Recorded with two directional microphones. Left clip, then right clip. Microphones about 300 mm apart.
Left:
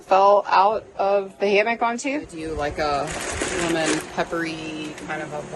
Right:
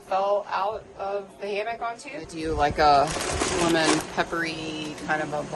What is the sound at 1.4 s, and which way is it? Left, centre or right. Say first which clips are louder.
Speech: left 10 dB; left.